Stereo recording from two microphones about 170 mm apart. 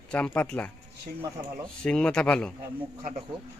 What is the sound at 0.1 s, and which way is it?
Speech, 10° left (ahead or behind).